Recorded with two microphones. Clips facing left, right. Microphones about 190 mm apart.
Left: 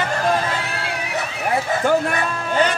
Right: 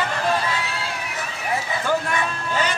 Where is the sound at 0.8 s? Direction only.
65° left (ahead or behind).